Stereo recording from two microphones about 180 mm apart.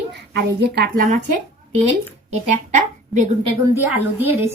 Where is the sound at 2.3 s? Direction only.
45° right (ahead or behind).